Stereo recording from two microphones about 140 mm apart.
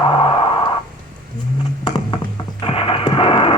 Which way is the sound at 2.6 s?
40° left (ahead or behind).